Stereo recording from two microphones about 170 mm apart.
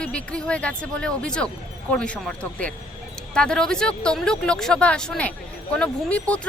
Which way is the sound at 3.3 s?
5° left (ahead or behind).